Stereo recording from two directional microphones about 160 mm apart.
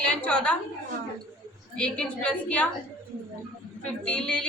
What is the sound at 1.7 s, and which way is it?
Speech, 5° left (ahead or behind).